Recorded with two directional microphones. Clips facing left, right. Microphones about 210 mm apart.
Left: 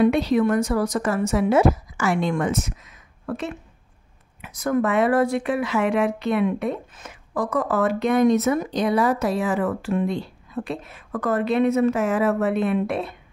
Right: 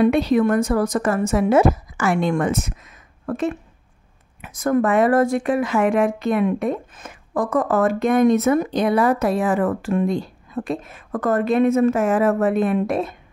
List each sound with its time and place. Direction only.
0.0 s speech: 55° right (ahead or behind)